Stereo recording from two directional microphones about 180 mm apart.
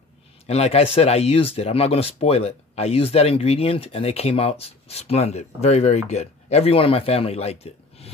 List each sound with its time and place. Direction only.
0.5 s speech: 35° left (ahead or behind)